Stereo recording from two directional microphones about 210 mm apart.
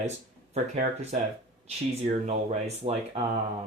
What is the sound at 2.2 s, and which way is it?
Speech, 35° right (ahead or behind).